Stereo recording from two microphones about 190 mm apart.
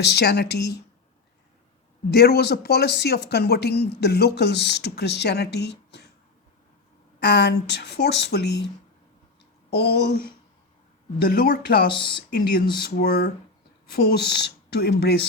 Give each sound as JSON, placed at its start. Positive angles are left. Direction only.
{"t": 0.0, "sound": "speech", "side_deg": 60}
{"t": 2.0, "sound": "speech", "side_deg": 55}
{"t": 7.2, "sound": "speech", "side_deg": 60}
{"t": 9.6, "sound": "speech", "side_deg": 60}
{"t": 11.3, "sound": "speech", "side_deg": 55}
{"t": 11.9, "sound": "speech", "side_deg": 25}
{"t": 12.8, "sound": "speech", "side_deg": 55}